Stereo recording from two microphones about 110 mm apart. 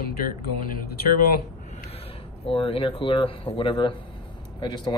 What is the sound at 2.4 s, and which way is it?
Speech, 60° left (ahead or behind).